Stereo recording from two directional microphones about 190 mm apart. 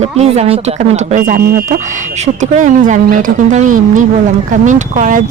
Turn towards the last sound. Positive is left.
turn(degrees=-40)  # may be behind; listen again after turning